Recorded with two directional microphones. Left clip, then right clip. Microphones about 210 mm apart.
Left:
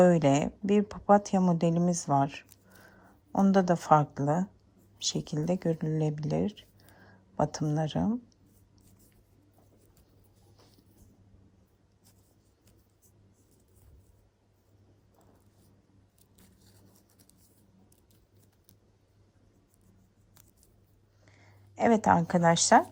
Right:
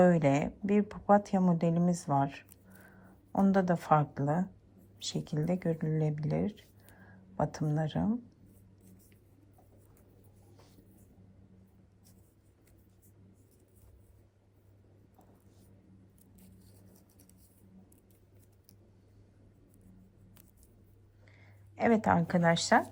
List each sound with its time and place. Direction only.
0.0 s a woman's voice: 15° left (ahead or behind)
21.2 s speech: 10° left (ahead or behind)